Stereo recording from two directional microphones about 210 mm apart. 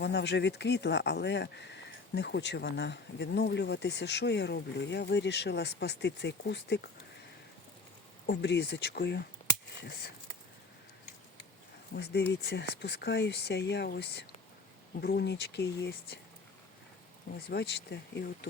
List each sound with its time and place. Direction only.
0.0 s speech: 55° left (ahead or behind)
8.3 s speech: 55° left (ahead or behind)
11.9 s speech: 55° left (ahead or behind)
17.5 s speech: 50° left (ahead or behind)